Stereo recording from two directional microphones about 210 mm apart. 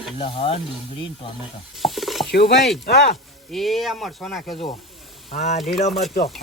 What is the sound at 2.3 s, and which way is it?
Mechanisms, 50° left (ahead or behind).